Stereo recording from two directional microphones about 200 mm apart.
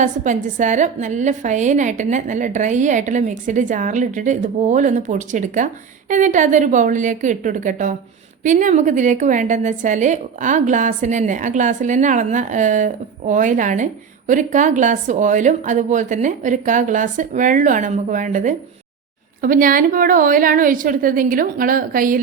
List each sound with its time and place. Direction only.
0.0 s a woman's voice: 40° right (ahead or behind)